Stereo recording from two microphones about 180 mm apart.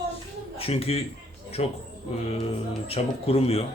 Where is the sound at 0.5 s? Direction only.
30° left (ahead or behind).